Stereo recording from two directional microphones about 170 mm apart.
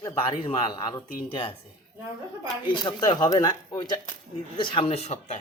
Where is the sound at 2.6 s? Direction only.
30° left (ahead or behind).